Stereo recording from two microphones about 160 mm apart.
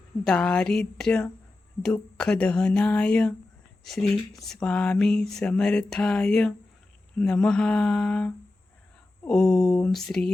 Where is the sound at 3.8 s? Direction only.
Centre (ahead or behind).